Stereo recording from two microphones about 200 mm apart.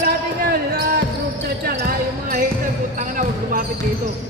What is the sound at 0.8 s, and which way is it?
Basketball bounce, 50° right (ahead or behind).